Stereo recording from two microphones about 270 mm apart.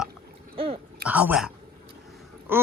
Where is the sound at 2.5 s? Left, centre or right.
Centre.